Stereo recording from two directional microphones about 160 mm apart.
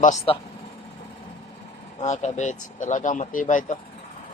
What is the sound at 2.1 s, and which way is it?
Speech, 45° left (ahead or behind).